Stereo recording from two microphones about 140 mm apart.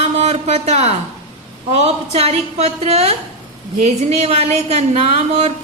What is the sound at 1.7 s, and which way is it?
A woman's voice, 50° right (ahead or behind).